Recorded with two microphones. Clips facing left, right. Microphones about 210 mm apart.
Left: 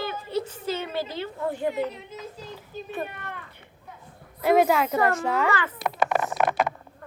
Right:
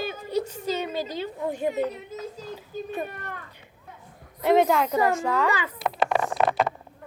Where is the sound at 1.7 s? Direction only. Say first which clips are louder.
Right 1 dB; 40° right (ahead or behind).